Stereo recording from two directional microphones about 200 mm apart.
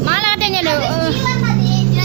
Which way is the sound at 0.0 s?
25° right (ahead or behind).